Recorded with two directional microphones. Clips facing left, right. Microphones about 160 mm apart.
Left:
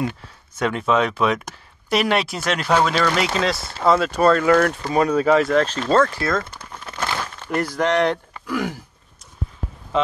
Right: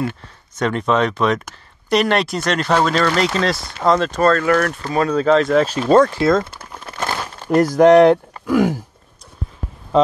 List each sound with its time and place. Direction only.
0.0 s speech: 10° left (ahead or behind)
5.5 s speech: 5° right (ahead or behind); by 6.4 s 25° right (ahead or behind)
7.3 s speech: 40° right (ahead or behind)